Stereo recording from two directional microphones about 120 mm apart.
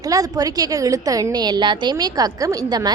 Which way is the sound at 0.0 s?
30° right (ahead or behind).